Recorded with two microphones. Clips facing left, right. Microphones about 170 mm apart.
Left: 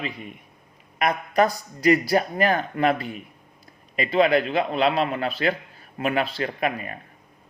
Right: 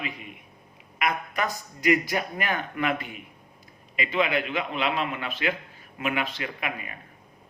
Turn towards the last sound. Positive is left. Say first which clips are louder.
# left 7 dB
turn(degrees=40)  # may be behind; listen again after turning